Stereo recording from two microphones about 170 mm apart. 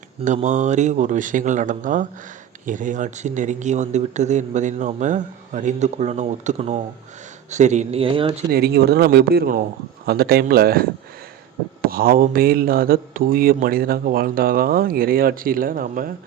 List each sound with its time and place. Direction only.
0.4 s speech: 45° right (ahead or behind)
8.4 s speech: 65° right (ahead or behind)